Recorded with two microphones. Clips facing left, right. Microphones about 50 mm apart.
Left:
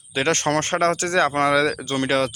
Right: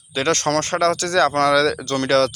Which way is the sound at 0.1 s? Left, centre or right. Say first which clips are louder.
Right 1 dB; left.